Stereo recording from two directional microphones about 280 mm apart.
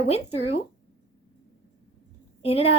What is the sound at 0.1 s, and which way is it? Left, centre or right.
Speech, left.